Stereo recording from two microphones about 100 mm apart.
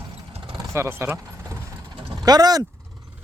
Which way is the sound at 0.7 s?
25° right (ahead or behind).